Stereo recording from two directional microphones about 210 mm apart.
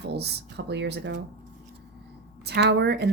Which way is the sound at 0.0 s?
50° right (ahead or behind).